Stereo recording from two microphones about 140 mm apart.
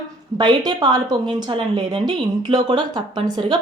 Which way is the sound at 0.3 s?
30° right (ahead or behind).